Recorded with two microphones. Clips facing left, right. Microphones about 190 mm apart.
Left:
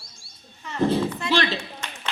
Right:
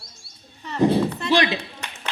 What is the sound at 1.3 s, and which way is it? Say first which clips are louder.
Speech: right 4 dB; 15° right (ahead or behind).